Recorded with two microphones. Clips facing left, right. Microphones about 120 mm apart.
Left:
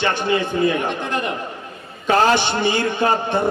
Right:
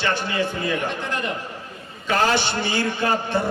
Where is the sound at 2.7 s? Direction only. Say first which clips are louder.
Left 3 dB; 55° left (ahead or behind).